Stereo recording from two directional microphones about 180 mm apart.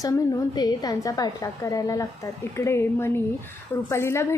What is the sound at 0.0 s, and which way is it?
A woman's voice, 20° left (ahead or behind).